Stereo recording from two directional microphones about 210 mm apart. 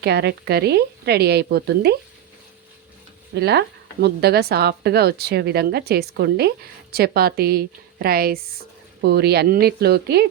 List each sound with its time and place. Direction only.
0.0 s a woman's voice: 50° right (ahead or behind)
3.3 s a woman's voice: 50° right (ahead or behind)